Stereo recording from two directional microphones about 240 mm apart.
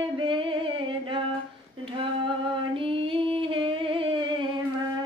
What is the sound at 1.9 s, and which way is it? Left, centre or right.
Female singing, right.